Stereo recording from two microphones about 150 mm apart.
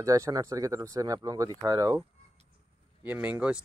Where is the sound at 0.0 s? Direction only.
20° right (ahead or behind).